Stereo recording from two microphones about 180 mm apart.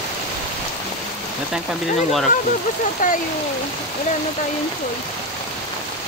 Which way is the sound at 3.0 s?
50° left (ahead or behind).